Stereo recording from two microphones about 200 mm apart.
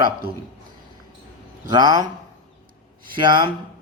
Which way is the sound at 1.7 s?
20° right (ahead or behind).